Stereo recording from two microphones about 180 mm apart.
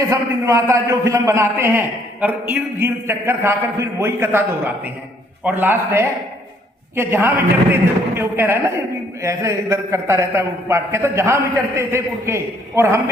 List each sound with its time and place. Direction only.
0.1 s a man's voice: 15° right (ahead or behind)